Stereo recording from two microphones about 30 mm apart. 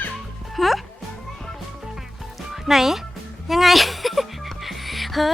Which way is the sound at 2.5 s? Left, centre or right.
Centre.